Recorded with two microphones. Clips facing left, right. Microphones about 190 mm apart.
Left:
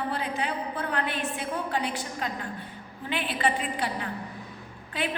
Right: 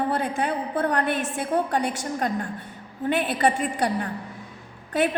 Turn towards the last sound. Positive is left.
turn(degrees=-50)  # may be behind; listen again after turning